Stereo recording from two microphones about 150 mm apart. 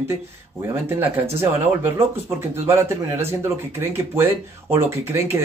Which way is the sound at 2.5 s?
15° right (ahead or behind).